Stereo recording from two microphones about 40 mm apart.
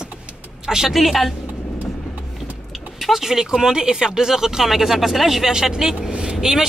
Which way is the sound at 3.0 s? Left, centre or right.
Centre.